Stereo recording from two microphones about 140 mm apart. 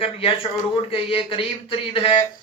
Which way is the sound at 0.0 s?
40° left (ahead or behind).